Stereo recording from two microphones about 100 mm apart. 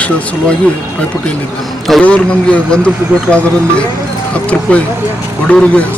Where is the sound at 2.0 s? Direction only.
10° left (ahead or behind).